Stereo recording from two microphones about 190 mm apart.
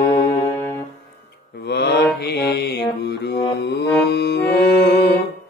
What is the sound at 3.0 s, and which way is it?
Music, 60° left (ahead or behind).